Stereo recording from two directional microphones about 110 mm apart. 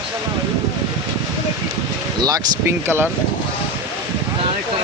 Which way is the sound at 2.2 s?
35° right (ahead or behind).